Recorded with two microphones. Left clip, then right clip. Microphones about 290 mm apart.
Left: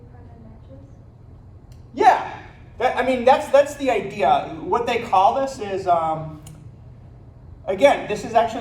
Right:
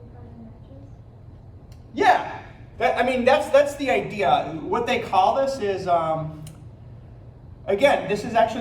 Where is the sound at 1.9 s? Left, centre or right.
Centre.